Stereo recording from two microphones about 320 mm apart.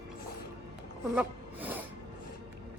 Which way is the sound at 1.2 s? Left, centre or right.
Centre.